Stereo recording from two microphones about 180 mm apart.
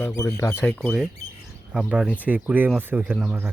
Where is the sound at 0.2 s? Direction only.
20° left (ahead or behind).